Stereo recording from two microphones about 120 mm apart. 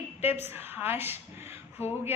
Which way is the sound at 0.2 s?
20° right (ahead or behind).